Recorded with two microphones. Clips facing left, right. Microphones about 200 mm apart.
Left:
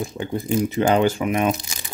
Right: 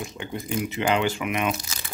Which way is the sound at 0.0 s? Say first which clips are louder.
Left 6 dB; 35° left (ahead or behind).